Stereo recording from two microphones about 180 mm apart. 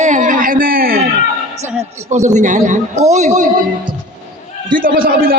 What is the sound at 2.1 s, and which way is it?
A man's voice, 40° right (ahead or behind).